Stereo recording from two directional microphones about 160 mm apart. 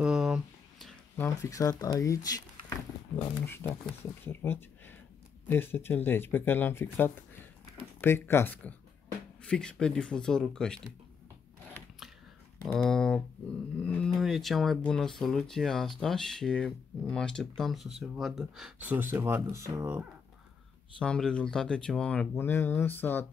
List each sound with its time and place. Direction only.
0.0 s a sound: 5° right (ahead or behind)
1.1 s speech: 15° left (ahead or behind)
3.4 s speech: 15° left (ahead or behind)
12.6 s speech: 5° left (ahead or behind); by 20.1 s 15° right (ahead or behind)
21.0 s speech: 5° left (ahead or behind)